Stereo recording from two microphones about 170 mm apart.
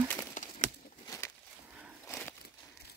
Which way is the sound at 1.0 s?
20° left (ahead or behind).